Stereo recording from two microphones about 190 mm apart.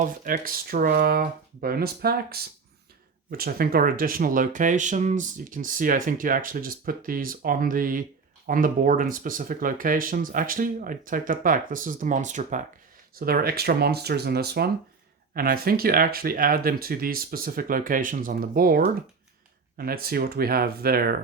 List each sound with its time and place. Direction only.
0.0 s speech: 45° right (ahead or behind)
13.1 s speech: 50° right (ahead or behind)